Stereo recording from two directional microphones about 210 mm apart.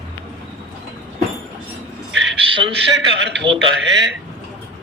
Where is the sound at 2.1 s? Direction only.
60° right (ahead or behind).